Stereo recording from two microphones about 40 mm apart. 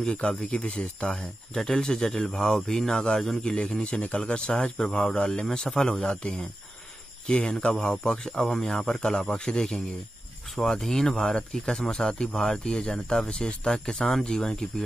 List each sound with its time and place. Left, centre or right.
0.0 s speech: left
1.5 s speech: centre
3.4 s speech: left
8.5 s speech: centre
10.8 s speech: centre